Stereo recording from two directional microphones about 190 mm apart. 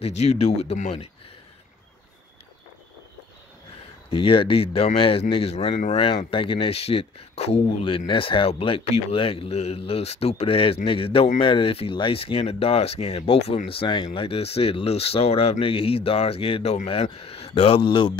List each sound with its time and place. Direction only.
0.0 s speech: 35° left (ahead or behind)
4.1 s speech: 30° left (ahead or behind)